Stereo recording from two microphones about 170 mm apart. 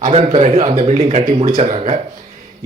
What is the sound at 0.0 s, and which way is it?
A man's voice, 40° right (ahead or behind).